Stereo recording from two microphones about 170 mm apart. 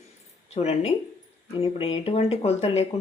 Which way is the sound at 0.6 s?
40° left (ahead or behind).